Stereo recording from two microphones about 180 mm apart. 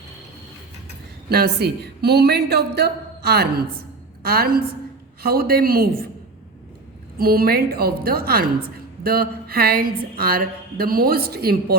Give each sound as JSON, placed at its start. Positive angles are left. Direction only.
{"t": 1.3, "sound": "a woman's voice", "side_deg": -60}
{"t": 7.2, "sound": "a woman's voice", "side_deg": -55}